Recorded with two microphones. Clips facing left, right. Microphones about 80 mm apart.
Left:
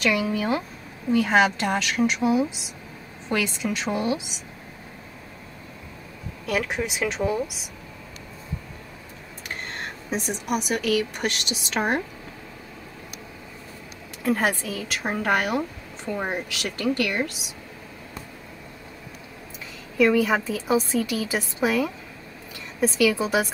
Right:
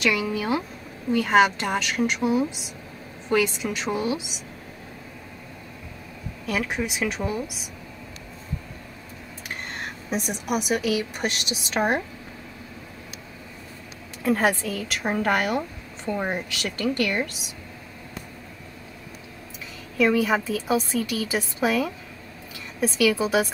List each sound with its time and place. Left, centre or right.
0.0 s a woman's voice: centre
3.9 s a woman's voice: centre
6.4 s a woman's voice: centre
9.7 s speech: centre
14.2 s a woman's voice: centre
20.0 s a woman's voice: centre